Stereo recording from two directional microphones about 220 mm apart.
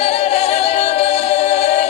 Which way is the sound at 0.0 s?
30° left (ahead or behind).